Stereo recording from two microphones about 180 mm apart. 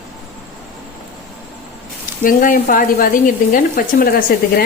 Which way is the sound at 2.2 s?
50° left (ahead or behind).